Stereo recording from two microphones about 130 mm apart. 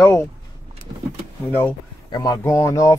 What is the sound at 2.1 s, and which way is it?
Speech, 30° left (ahead or behind).